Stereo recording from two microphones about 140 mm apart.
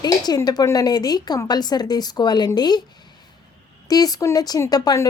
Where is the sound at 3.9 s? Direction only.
25° left (ahead or behind).